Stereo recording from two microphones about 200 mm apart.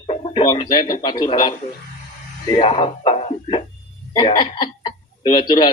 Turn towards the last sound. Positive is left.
turn(degrees=20)  # may be behind; listen again after turning